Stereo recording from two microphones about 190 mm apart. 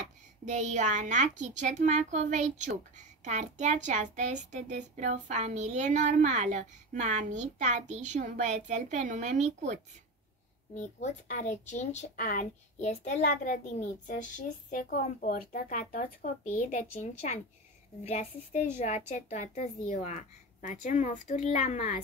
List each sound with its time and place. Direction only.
0.5 s speech: 40° right (ahead or behind)
11.0 s a woman's voice: 40° left (ahead or behind)
17.0 s a woman's voice: 35° left (ahead or behind)